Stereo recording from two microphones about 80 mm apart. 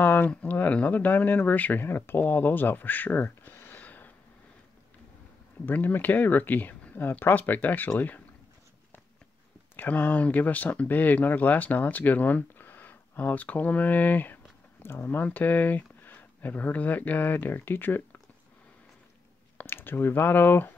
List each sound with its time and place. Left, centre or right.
0.0 s a sound: left
0.3 s speech: centre
5.7 s speech: left
9.8 s speech: left
19.5 s speech: left